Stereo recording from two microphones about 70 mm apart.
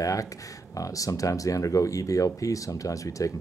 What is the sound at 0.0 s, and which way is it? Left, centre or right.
Speech, left.